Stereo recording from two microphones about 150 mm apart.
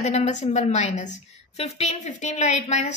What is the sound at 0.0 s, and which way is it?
A woman's voice, 50° left (ahead or behind).